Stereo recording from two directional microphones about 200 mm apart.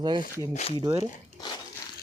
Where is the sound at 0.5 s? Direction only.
30° left (ahead or behind).